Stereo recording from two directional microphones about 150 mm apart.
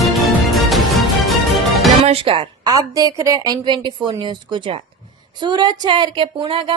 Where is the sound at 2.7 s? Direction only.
25° right (ahead or behind).